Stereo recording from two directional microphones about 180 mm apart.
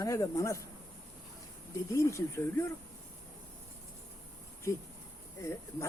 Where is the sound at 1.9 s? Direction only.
15° left (ahead or behind).